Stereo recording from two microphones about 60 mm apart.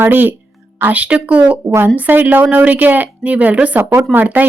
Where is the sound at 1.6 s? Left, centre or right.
Right.